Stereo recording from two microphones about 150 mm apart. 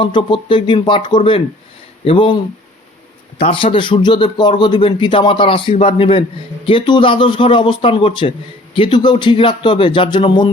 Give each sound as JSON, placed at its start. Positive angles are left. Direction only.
{"t": 0.0, "sound": "a man's voice", "side_deg": 30}